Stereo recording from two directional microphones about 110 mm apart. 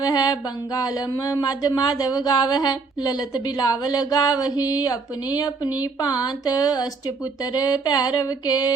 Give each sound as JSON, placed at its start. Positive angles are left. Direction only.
{"t": 0.0, "sound": "mantra", "side_deg": 35}